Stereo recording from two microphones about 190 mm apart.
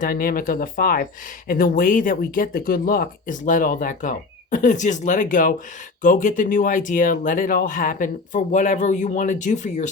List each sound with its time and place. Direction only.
0.0 s speech: 45° left (ahead or behind)